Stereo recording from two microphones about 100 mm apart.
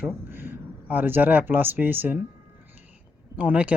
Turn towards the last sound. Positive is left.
turn(degrees=-15)  # may be behind; listen again after turning